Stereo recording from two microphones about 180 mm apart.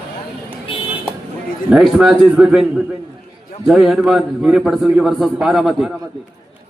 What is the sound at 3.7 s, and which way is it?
A man's voice, 5° right (ahead or behind).